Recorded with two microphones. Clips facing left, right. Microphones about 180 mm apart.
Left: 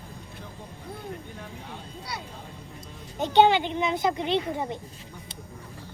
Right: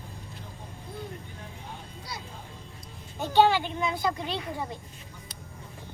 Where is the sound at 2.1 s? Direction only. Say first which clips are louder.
Left 3 dB; 65° left (ahead or behind).